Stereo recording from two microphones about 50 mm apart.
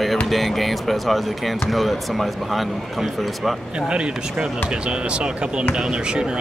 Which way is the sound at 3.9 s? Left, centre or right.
Right.